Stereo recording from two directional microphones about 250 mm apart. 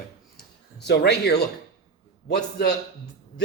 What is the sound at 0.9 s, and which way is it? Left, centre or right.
Speech, left.